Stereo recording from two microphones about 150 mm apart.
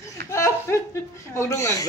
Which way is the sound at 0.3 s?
20° left (ahead or behind).